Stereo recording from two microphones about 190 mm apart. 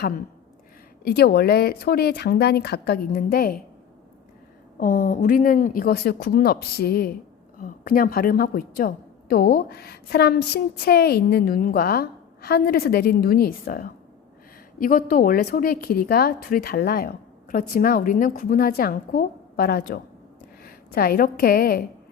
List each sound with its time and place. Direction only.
1.0 s speech: 55° left (ahead or behind)
4.8 s a woman's voice: 45° left (ahead or behind)